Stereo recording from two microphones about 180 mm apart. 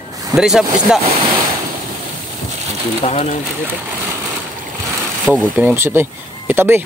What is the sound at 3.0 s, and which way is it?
Speech, 35° left (ahead or behind).